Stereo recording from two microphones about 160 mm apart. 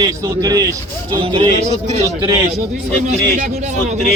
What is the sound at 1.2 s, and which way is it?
Speech, 35° right (ahead or behind).